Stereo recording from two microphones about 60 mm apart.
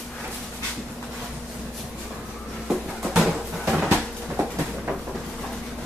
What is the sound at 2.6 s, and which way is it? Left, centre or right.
Music, centre.